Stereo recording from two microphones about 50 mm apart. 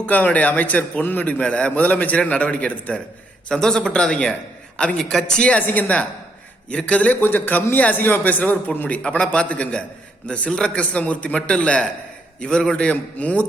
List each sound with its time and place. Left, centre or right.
0.0 s a man's voice: left
1.3 s a man's voice: left
3.5 s speech: centre
5.5 s a man's voice: left
6.7 s a man's voice: left
9.0 s a man's voice: centre